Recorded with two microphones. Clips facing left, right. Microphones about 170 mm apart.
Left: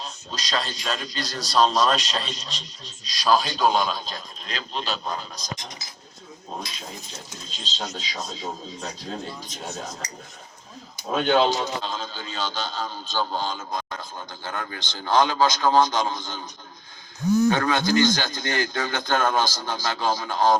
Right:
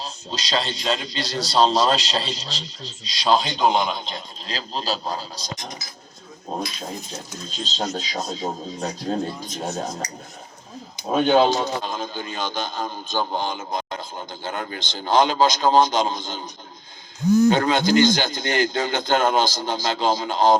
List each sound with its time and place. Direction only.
0.0 s a man's voice: 30° right (ahead or behind)
7.6 s speech: 45° right (ahead or behind)
10.9 s a man's voice: 20° right (ahead or behind)
17.5 s a man's voice: 20° right (ahead or behind)